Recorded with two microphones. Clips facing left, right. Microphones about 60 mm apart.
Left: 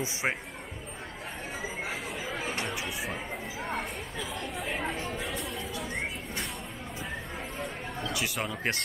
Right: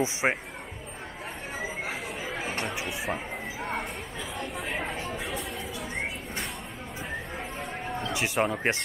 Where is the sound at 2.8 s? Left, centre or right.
Right.